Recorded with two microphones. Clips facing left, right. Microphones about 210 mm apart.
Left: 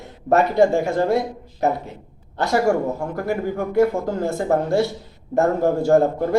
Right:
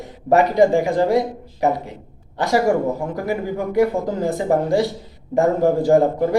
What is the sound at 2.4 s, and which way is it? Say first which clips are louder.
A man's voice: right 1 dB; 15° right (ahead or behind).